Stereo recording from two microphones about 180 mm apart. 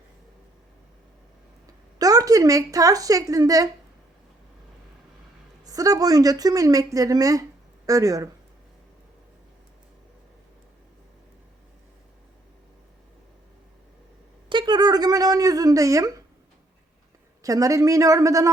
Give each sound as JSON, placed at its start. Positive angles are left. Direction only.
{"t": 2.0, "sound": "speech", "side_deg": -20}
{"t": 5.6, "sound": "speech", "side_deg": -20}
{"t": 14.5, "sound": "a sound", "side_deg": -25}
{"t": 17.4, "sound": "speech", "side_deg": -20}